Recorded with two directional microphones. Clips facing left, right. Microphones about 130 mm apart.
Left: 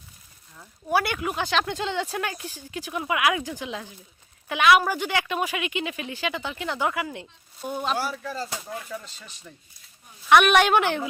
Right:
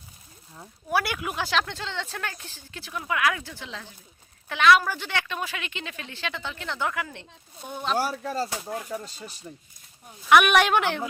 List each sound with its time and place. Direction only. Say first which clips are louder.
0.9 s speech: left 3 dB; centre (ahead or behind)
1.6 s speech: left 6 dB; 15° left (ahead or behind)
7.9 s speech: right 3 dB; 40° right (ahead or behind)
10.2 s speech: left 1 dB; 5° right (ahead or behind)